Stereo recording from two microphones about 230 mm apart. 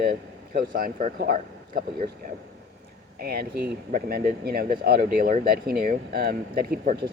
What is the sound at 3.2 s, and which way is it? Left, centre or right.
Speech, right.